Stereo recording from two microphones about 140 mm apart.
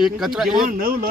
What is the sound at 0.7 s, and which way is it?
Speech, 90° right.